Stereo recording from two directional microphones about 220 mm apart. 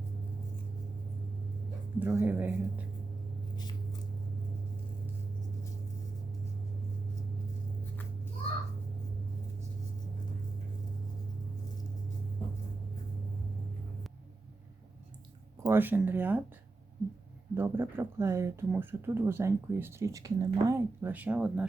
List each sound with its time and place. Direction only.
2.0 s speech: 10° right (ahead or behind)
3.5 s a sound: 20° left (ahead or behind)
15.6 s speech: 10° right (ahead or behind)
17.5 s speech: 10° right (ahead or behind)